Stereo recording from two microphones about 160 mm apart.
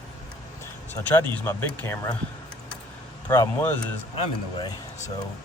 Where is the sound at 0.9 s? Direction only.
20° left (ahead or behind).